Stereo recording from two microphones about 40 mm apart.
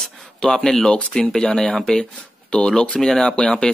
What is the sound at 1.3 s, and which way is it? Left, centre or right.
Speech, centre.